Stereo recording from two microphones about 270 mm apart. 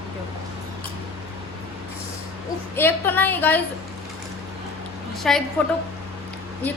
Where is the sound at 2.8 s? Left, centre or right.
Centre.